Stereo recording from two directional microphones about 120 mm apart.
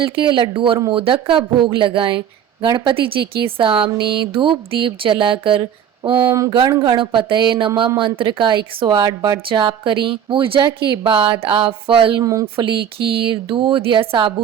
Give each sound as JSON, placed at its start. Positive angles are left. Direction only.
{"t": 0.0, "sound": "speech", "side_deg": -45}
{"t": 6.1, "sound": "speech", "side_deg": -25}
{"t": 6.5, "sound": "a woman's voice", "side_deg": -40}
{"t": 9.5, "sound": "speech", "side_deg": -45}
{"t": 12.2, "sound": "speech", "side_deg": -30}
{"t": 13.0, "sound": "speech", "side_deg": -50}